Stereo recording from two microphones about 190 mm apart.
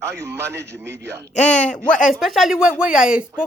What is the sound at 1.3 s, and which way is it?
Speech, 40° left (ahead or behind).